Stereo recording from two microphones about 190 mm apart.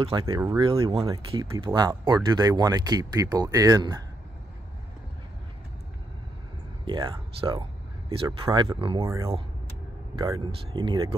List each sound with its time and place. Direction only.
0.0 s speech: 30° right (ahead or behind)
6.8 s speech: 25° right (ahead or behind)